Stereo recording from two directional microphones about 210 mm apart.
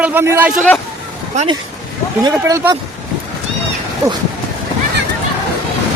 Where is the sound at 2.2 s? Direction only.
20° right (ahead or behind).